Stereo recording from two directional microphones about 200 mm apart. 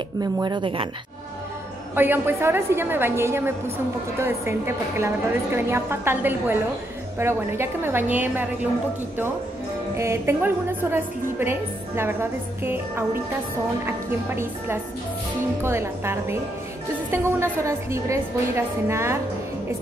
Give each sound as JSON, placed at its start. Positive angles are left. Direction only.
{"t": 0.2, "sound": "speech", "side_deg": -20}
{"t": 2.0, "sound": "a woman's voice", "side_deg": -10}
{"t": 9.9, "sound": "a woman's voice", "side_deg": -15}